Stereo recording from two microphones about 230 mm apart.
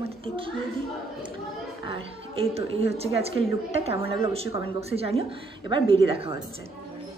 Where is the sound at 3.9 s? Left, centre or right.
Left.